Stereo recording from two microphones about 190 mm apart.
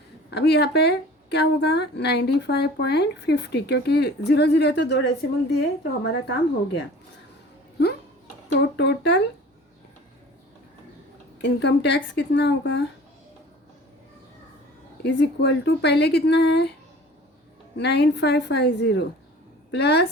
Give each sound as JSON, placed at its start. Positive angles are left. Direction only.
{"t": 0.3, "sound": "speech", "side_deg": 60}
{"t": 8.5, "sound": "speech", "side_deg": 65}
{"t": 11.4, "sound": "speech", "side_deg": 65}
{"t": 15.0, "sound": "speech", "side_deg": 65}
{"t": 17.7, "sound": "speech", "side_deg": 65}